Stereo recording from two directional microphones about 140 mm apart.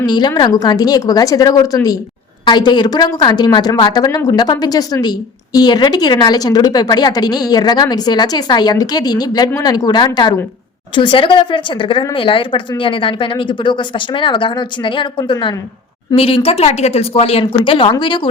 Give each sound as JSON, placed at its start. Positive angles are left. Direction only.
{"t": 0.0, "sound": "a woman's voice", "side_deg": 30}
{"t": 17.4, "sound": "speech", "side_deg": 35}